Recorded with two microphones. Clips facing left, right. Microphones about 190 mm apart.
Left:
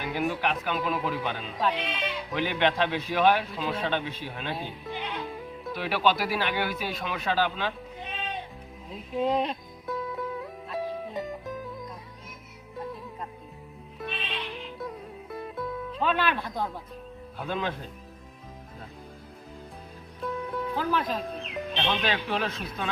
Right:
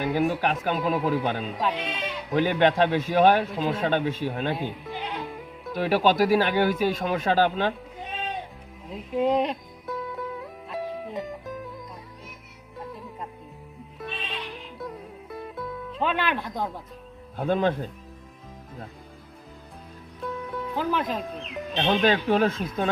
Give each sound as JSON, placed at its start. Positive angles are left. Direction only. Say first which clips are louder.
{"t": 0.1, "sound": "a man's voice", "louder": "right 1 dB", "side_deg": -40}
{"t": 1.5, "sound": "speech", "louder": "right 1 dB", "side_deg": -5}
{"t": 2.3, "sound": "a man's voice", "louder": "right 6 dB", "side_deg": -45}
{"t": 4.9, "sound": "music", "louder": "right 1 dB", "side_deg": 0}
{"t": 5.7, "sound": "a man's voice", "louder": "right 5 dB", "side_deg": -45}
{"t": 9.1, "sound": "speech", "louder": "right 3 dB", "side_deg": -10}
{"t": 9.8, "sound": "music", "louder": "even", "side_deg": 0}
{"t": 12.7, "sound": "music", "louder": "left 1 dB", "side_deg": 0}
{"t": 16.0, "sound": "speech", "louder": "right 1 dB", "side_deg": -15}
{"t": 17.3, "sound": "a man's voice", "louder": "right 8 dB", "side_deg": -50}
{"t": 20.2, "sound": "music", "louder": "left 1 dB", "side_deg": 0}
{"t": 20.7, "sound": "music", "louder": "right 2 dB", "side_deg": -15}
{"t": 21.8, "sound": "a man's voice", "louder": "right 7 dB", "side_deg": -45}